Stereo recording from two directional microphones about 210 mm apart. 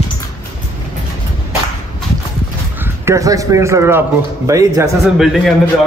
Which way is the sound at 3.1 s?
15° right (ahead or behind).